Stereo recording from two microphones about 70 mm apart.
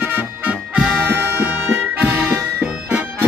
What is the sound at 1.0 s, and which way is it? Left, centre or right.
Music, right.